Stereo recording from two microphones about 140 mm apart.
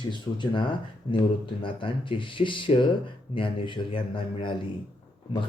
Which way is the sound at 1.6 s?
40° left (ahead or behind).